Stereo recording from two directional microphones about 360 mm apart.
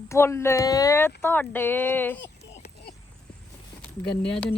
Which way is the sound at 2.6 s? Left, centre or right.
Centre.